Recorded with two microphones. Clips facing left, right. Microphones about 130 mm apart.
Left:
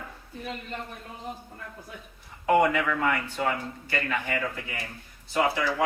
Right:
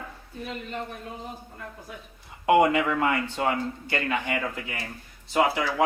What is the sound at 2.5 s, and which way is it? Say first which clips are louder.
Speech: right 2 dB; 25° right (ahead or behind).